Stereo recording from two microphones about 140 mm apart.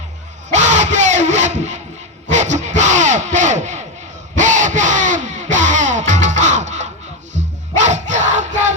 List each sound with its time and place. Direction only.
0.5 s a sound: 60° right (ahead or behind)
2.3 s battle cry: 60° right (ahead or behind)
4.4 s music: 60° right (ahead or behind)